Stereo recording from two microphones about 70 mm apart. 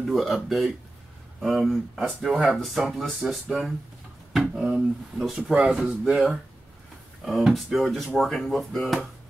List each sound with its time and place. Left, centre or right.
0.0 s speech: centre
4.7 s speech: centre
5.5 s speech: centre
7.2 s speech: centre